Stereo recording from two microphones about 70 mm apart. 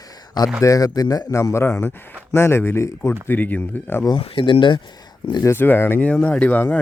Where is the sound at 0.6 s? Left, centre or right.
Left.